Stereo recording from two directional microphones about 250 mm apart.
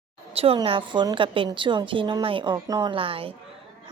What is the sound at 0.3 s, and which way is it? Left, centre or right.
A woman's voice, right.